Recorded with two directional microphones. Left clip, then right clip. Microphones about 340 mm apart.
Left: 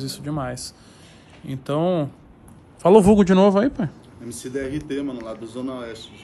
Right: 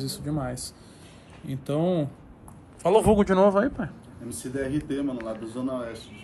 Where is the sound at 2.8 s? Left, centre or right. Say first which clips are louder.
Left 7 dB; left.